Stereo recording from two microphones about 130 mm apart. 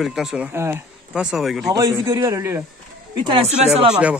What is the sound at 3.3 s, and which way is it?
Speech, 55° right (ahead or behind).